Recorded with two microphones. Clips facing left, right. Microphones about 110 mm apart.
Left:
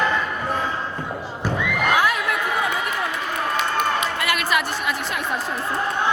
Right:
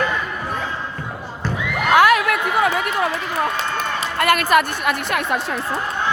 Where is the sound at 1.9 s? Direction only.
75° right (ahead or behind).